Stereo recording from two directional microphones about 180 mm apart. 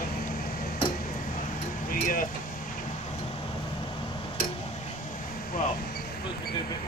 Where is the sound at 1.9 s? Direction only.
50° left (ahead or behind).